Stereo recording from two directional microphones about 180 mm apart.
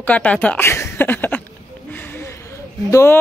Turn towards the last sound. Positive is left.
turn(degrees=15)  # may be behind; listen again after turning